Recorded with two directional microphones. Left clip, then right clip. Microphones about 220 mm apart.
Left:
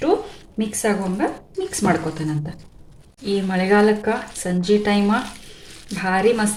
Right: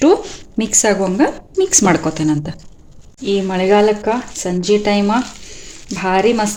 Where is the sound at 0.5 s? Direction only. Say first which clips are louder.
Right 7 dB; 45° right (ahead or behind).